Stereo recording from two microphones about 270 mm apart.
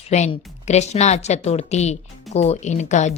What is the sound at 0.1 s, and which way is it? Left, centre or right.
A woman's voice, left.